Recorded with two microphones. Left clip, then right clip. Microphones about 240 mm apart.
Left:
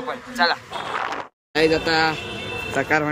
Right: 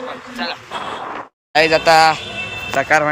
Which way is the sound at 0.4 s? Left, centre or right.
Left.